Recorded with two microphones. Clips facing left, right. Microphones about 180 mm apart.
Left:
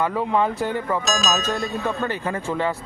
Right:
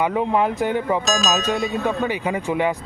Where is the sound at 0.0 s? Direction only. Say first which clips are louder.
Right 2 dB; 20° right (ahead or behind).